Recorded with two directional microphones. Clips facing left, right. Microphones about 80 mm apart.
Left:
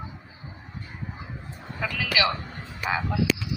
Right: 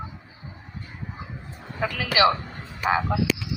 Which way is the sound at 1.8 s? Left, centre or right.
Right.